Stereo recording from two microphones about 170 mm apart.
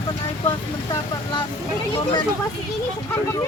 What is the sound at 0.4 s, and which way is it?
Speech, 30° left (ahead or behind).